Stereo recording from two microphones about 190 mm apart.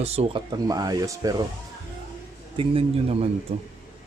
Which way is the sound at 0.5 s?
20° right (ahead or behind).